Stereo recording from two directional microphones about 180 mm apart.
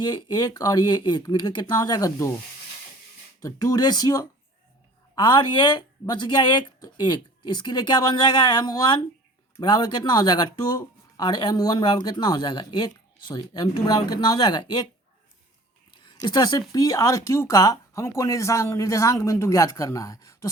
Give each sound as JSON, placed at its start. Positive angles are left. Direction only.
{"t": 0.0, "sound": "speech", "side_deg": 25}
{"t": 3.4, "sound": "speech", "side_deg": 20}
{"t": 15.9, "sound": "speech", "side_deg": 25}